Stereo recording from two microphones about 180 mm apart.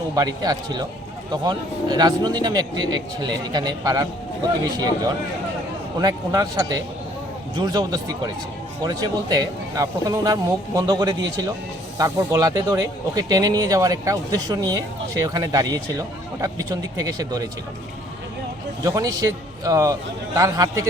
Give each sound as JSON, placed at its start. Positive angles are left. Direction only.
{"t": 0.2, "sound": "a man's voice", "side_deg": -20}
{"t": 6.0, "sound": "a man's voice", "side_deg": -20}
{"t": 18.8, "sound": "a man's voice", "side_deg": -20}